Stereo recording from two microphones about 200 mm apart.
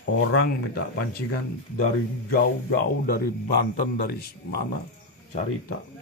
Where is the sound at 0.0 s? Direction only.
65° left (ahead or behind).